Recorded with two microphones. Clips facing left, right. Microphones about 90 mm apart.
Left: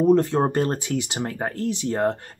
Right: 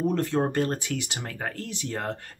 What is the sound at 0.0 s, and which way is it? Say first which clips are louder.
Speech: left 7 dB; 25° left (ahead or behind).